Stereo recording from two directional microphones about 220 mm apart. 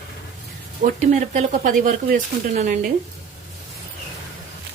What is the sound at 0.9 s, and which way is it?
Speech, 35° right (ahead or behind).